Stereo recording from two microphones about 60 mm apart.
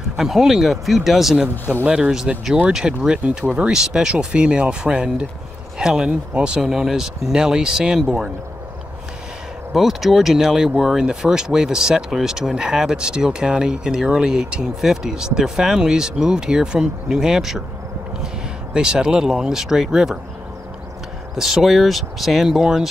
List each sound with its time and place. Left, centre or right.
0.2 s speech: centre
9.8 s speech: centre
21.4 s speech: centre